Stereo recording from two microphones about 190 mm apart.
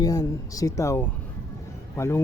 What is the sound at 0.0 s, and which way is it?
Speech, 20° left (ahead or behind).